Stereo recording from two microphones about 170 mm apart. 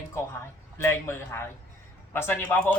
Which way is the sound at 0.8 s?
15° left (ahead or behind).